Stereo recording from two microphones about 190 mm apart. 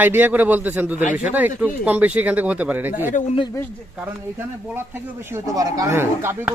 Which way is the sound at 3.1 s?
40° left (ahead or behind).